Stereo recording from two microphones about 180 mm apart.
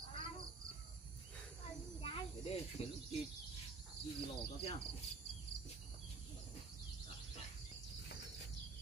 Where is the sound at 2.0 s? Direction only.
30° left (ahead or behind).